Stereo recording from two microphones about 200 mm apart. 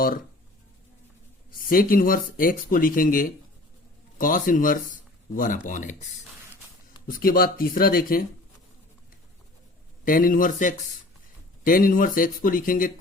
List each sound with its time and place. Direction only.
1.5 s speech: 45° left (ahead or behind)
7.1 s speech: 45° left (ahead or behind)
10.0 s speech: 45° left (ahead or behind)